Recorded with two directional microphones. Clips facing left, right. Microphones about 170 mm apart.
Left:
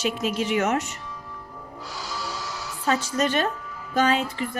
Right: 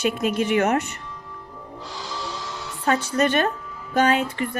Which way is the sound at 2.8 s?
60° right (ahead or behind).